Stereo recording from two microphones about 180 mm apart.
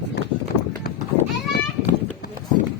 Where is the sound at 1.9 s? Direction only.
45° left (ahead or behind).